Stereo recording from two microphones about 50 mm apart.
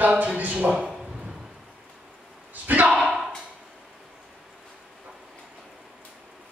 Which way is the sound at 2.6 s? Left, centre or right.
Right.